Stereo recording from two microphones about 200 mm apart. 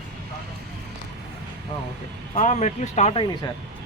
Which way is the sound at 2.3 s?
35° left (ahead or behind).